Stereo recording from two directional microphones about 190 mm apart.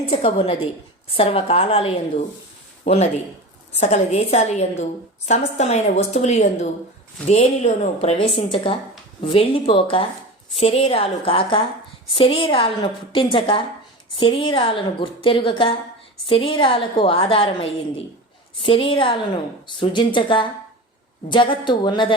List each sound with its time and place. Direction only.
0.1 s a woman's voice: 30° left (ahead or behind)